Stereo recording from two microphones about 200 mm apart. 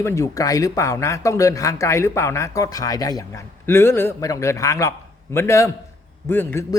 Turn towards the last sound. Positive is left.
turn(degrees=10)  # may be behind; listen again after turning